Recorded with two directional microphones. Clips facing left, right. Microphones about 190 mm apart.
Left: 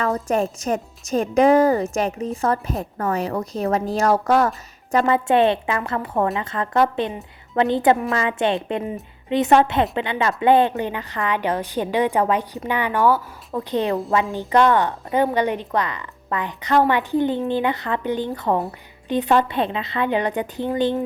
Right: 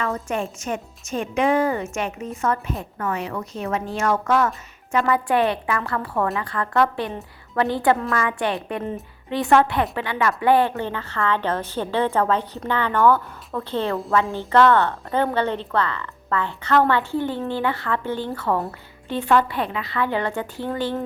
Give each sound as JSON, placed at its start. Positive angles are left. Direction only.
{"t": 0.0, "sound": "a woman's voice", "side_deg": 40}
{"t": 5.0, "sound": "a woman's voice", "side_deg": 25}